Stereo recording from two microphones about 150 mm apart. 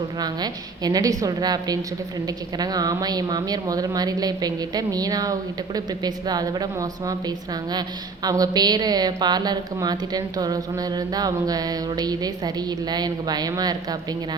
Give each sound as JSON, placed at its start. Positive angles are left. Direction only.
{"t": 0.2, "sound": "a woman's voice", "side_deg": -25}